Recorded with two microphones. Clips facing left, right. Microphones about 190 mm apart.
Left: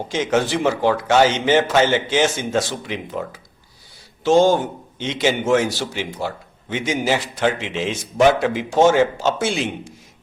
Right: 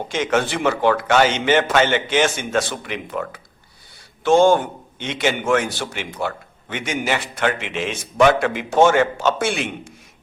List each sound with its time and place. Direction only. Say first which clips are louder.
0.1 s a man's voice: left 1 dB; 55° right (ahead or behind)